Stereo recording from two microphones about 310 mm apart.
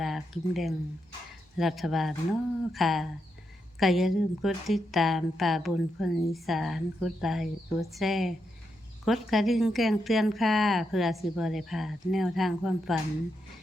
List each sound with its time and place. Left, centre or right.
0.0 s a woman's voice: centre